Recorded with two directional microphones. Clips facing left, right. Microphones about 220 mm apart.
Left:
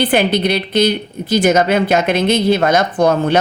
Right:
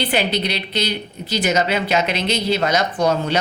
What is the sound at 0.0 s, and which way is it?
A woman's voice, 50° left (ahead or behind).